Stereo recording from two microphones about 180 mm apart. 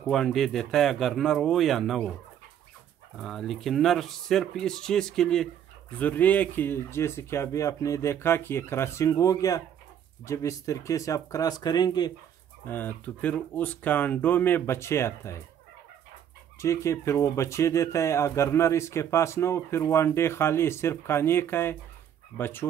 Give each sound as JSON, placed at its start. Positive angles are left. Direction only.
{"t": 0.0, "sound": "speech", "side_deg": 0}
{"t": 3.2, "sound": "speech", "side_deg": 0}
{"t": 12.6, "sound": "speech", "side_deg": 10}
{"t": 16.5, "sound": "speech", "side_deg": 15}